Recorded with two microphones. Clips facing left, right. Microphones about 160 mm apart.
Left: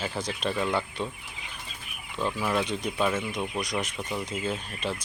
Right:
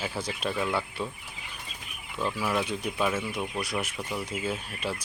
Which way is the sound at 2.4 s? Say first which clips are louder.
Left 1 dB; 5° right (ahead or behind).